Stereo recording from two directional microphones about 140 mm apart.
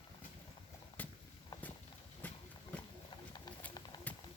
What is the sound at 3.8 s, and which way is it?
Clip-clop, 30° left (ahead or behind).